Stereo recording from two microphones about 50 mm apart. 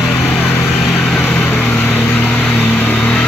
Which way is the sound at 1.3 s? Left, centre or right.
Left.